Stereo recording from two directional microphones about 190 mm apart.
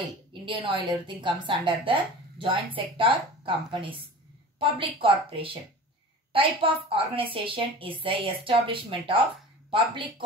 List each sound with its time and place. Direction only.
0.3 s a woman's voice: 25° right (ahead or behind)